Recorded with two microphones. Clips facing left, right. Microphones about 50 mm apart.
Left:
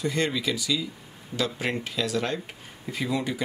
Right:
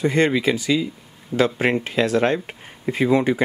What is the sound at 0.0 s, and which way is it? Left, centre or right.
Speech, right.